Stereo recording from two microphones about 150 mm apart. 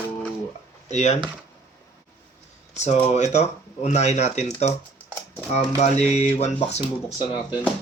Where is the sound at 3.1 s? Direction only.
50° left (ahead or behind).